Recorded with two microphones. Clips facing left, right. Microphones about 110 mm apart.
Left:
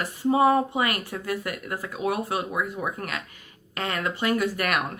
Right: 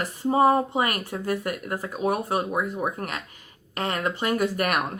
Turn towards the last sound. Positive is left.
turn(degrees=-45)  # may be behind; listen again after turning